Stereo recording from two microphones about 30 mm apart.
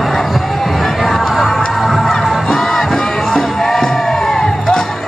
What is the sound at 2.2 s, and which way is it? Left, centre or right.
Music, centre.